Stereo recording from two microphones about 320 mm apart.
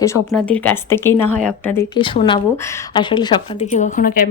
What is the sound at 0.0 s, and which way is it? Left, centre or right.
Speech, centre.